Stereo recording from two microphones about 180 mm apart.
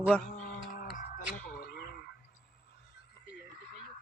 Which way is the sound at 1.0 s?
50° left (ahead or behind).